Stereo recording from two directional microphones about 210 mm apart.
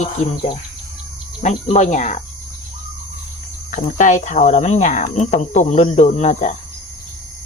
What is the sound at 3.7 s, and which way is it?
Speech, 35° left (ahead or behind).